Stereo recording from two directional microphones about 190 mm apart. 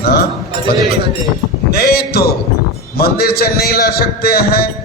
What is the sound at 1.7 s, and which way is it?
A man's voice, 55° left (ahead or behind).